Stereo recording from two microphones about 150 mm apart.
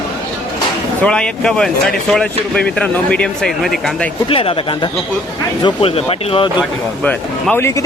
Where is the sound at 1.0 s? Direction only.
5° left (ahead or behind).